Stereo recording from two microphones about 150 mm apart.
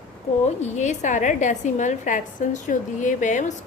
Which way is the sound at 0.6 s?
50° left (ahead or behind).